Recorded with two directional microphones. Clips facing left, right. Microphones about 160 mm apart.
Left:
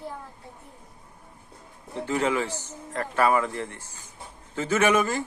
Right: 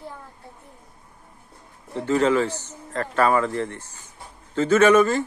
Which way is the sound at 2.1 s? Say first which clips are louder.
Right 6 dB; 15° left (ahead or behind).